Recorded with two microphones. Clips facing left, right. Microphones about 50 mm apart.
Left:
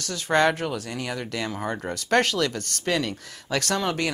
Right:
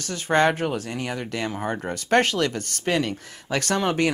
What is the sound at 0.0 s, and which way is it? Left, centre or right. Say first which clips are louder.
Speech: right 1 dB; centre.